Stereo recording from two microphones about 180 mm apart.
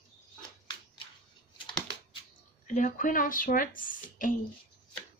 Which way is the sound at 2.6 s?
45° left (ahead or behind).